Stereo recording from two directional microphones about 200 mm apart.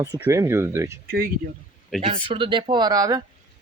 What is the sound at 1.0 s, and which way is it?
Speech, 45° right (ahead or behind).